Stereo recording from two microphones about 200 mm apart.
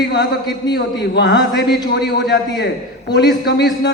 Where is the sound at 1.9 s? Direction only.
55° left (ahead or behind).